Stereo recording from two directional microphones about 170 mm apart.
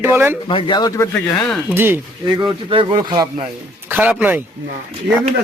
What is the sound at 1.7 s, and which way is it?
Speech, 15° right (ahead or behind).